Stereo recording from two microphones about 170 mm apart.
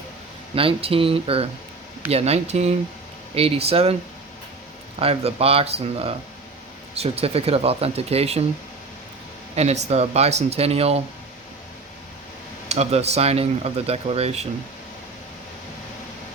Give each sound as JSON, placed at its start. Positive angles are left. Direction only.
{"t": 0.5, "sound": "speech", "side_deg": -35}
{"t": 4.9, "sound": "speech", "side_deg": -35}
{"t": 9.6, "sound": "speech", "side_deg": -40}
{"t": 12.6, "sound": "speech", "side_deg": -40}